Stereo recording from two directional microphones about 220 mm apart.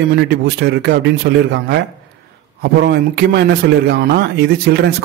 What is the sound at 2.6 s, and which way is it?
A man's voice, 50° right (ahead or behind).